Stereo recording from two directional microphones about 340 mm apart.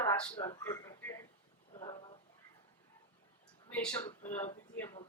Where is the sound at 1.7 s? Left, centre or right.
Centre.